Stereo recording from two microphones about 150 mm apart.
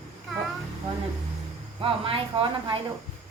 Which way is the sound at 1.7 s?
35° right (ahead or behind).